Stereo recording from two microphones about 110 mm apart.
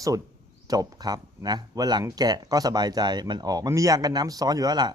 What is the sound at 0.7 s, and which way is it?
Speech, 35° right (ahead or behind).